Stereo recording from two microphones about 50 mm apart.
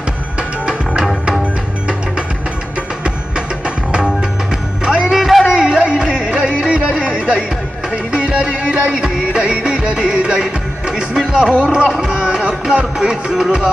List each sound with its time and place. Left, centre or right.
0.4 s music: centre
3.0 s music: centre
5.2 s a sound: centre
5.5 s music: centre